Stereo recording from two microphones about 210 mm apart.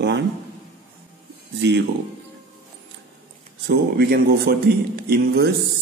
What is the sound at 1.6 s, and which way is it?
Speech, 55° right (ahead or behind).